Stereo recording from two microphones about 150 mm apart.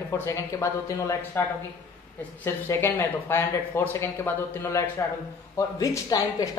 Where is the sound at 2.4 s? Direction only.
15° left (ahead or behind).